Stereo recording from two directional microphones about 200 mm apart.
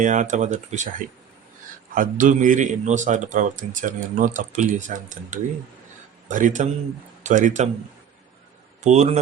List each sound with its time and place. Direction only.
0.0 s a man's voice: 40° right (ahead or behind)
2.0 s a man's voice: 40° right (ahead or behind)
8.8 s a man's voice: 35° right (ahead or behind)